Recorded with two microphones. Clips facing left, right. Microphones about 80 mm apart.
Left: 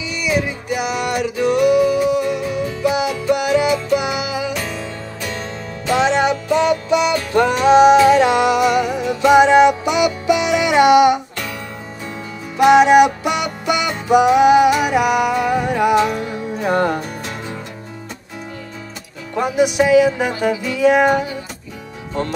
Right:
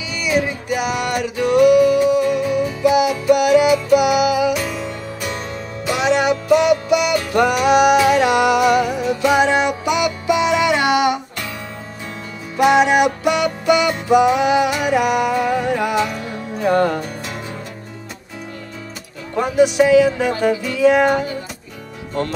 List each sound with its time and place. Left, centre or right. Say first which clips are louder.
0.7 s music: even; left
5.9 s music: left 1 dB; left
12.5 s music: left 4 dB; left
19.4 s music: right 2 dB; centre